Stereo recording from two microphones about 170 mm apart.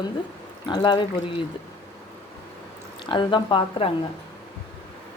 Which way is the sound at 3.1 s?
30° left (ahead or behind).